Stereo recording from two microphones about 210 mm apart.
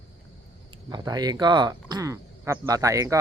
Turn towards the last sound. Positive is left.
turn(degrees=-15)  # may be behind; listen again after turning